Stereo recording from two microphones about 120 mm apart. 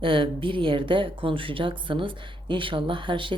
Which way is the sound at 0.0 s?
45° right (ahead or behind).